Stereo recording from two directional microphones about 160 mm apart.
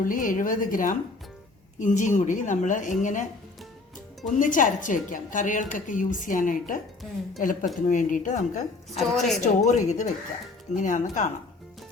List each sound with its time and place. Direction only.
0.0 s a woman's voice: 60° left (ahead or behind)
4.4 s a woman's voice: 55° left (ahead or behind)
9.0 s a woman's voice: centre (ahead or behind)
9.4 s a woman's voice: 45° left (ahead or behind)